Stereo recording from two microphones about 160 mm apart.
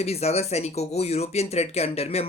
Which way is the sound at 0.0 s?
40° left (ahead or behind).